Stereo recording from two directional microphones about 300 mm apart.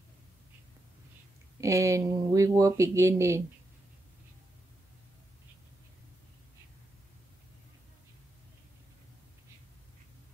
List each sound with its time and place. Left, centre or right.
1.6 s speech: centre